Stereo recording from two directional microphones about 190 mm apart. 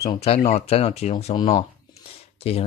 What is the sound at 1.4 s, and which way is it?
Speech, 20° left (ahead or behind).